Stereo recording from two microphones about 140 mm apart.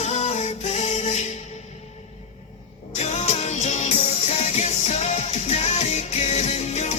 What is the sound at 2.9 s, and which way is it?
Music, 50° left (ahead or behind).